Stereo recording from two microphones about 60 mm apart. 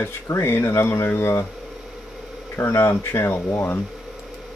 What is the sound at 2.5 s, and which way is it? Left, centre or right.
Speech, left.